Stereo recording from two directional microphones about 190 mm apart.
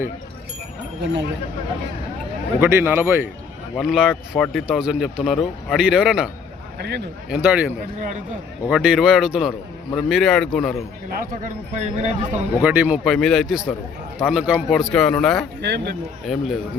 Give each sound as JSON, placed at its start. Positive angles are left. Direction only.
{"t": 2.6, "sound": "a man's voice", "side_deg": -15}
{"t": 3.8, "sound": "a man's voice", "side_deg": 0}
{"t": 6.7, "sound": "speech", "side_deg": -60}
{"t": 7.3, "sound": "a man's voice", "side_deg": -5}
{"t": 7.9, "sound": "a man's voice", "side_deg": -40}
{"t": 8.7, "sound": "a man's voice", "side_deg": -5}
{"t": 11.2, "sound": "a man's voice", "side_deg": -40}
{"t": 12.6, "sound": "a man's voice", "side_deg": -5}
{"t": 15.6, "sound": "speech", "side_deg": -65}
{"t": 16.2, "sound": "a man's voice", "side_deg": 0}